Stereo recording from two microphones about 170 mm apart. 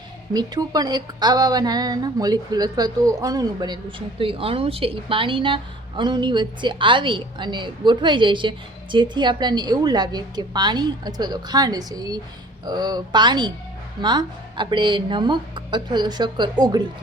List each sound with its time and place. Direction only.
0.3 s a woman's voice: 25° right (ahead or behind)